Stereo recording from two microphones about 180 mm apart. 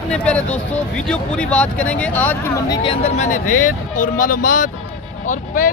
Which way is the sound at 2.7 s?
30° left (ahead or behind).